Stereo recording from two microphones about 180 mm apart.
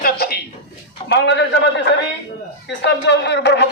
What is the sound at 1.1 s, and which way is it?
Speech, 70° left (ahead or behind).